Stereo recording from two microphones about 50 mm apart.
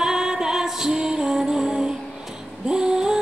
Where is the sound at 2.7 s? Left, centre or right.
Centre.